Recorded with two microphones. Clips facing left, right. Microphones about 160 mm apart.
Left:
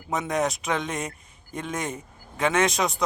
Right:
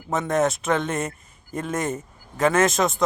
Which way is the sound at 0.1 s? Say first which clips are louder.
Right 4 dB; centre (ahead or behind).